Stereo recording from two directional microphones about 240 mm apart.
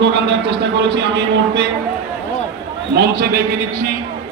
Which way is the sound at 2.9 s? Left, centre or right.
Right.